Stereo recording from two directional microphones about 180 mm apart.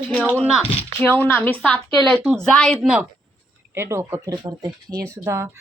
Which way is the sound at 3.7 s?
15° right (ahead or behind).